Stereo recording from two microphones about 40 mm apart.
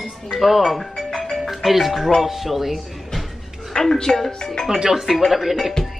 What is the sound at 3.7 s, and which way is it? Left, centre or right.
Speech, centre.